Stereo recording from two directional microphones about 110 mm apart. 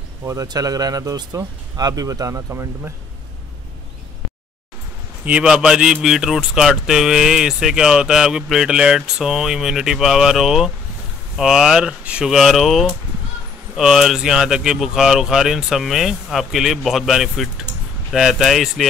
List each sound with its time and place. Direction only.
0.2 s speech: 30° right (ahead or behind)
5.2 s a man's voice: 10° right (ahead or behind)